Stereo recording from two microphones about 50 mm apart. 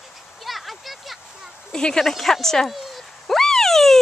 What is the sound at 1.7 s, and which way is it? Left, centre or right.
Speech, centre.